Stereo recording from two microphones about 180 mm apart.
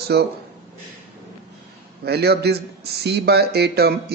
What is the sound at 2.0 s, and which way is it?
Speech, 65° right (ahead or behind).